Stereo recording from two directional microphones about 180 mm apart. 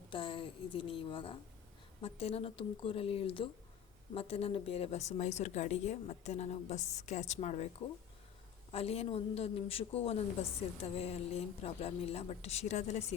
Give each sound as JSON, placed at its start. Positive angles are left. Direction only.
{"t": 0.1, "sound": "a woman's voice", "side_deg": 25}
{"t": 8.7, "sound": "speech", "side_deg": 35}